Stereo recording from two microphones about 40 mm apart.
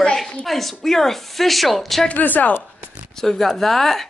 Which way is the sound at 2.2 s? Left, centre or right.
Left.